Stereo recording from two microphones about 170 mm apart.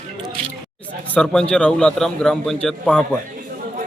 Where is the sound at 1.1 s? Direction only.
5° left (ahead or behind).